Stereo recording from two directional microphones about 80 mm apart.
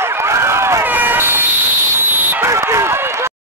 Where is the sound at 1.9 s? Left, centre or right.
Right.